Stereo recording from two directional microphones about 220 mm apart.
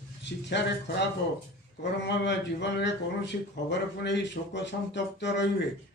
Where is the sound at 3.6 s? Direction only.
50° left (ahead or behind).